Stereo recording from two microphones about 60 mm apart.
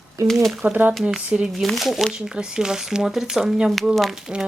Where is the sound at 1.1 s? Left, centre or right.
Centre.